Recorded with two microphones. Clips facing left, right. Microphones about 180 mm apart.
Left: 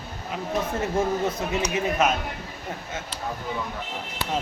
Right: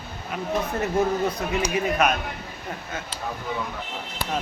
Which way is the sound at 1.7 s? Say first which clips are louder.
Right 1 dB; 25° left (ahead or behind).